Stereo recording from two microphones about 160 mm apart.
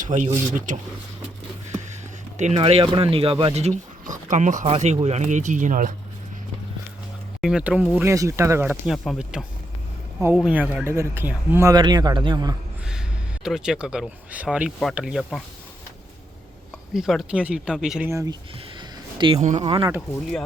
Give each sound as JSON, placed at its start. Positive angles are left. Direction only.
{"t": 0.0, "sound": "speech", "side_deg": -50}
{"t": 2.6, "sound": "speech", "side_deg": -35}
{"t": 7.4, "sound": "speech", "side_deg": -5}
{"t": 11.7, "sound": "speech", "side_deg": -25}
{"t": 12.8, "sound": "speech", "side_deg": -5}
{"t": 16.9, "sound": "speech", "side_deg": 0}
{"t": 18.1, "sound": "speech", "side_deg": -20}
{"t": 18.8, "sound": "a sound", "side_deg": -30}
{"t": 19.4, "sound": "speech", "side_deg": -45}